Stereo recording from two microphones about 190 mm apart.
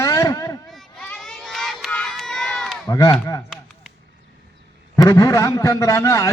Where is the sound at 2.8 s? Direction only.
15° left (ahead or behind).